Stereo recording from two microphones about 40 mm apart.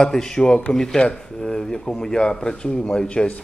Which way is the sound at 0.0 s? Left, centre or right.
Centre.